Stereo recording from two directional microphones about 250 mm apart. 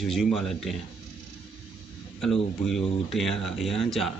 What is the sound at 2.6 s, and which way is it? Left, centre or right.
Speech, centre.